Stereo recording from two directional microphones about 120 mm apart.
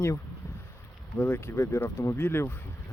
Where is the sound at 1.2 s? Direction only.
20° left (ahead or behind).